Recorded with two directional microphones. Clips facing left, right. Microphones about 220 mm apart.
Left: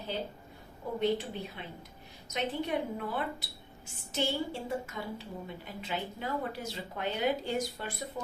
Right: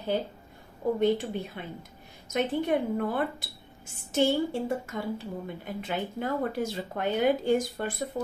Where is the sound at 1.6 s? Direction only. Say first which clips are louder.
Right 5 dB; 55° right (ahead or behind).